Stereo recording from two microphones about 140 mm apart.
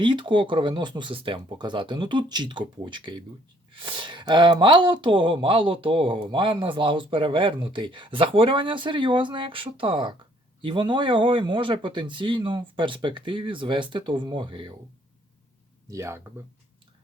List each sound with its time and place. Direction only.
0.0 s speech: 35° right (ahead or behind)
15.9 s speech: 20° right (ahead or behind)